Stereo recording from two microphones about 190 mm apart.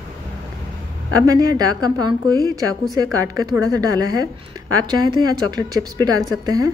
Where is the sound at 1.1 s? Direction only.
20° right (ahead or behind).